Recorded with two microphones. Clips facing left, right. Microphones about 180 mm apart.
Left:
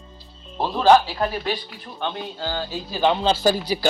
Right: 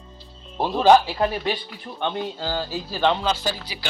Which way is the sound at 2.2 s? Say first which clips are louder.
Right 2 dB; centre (ahead or behind).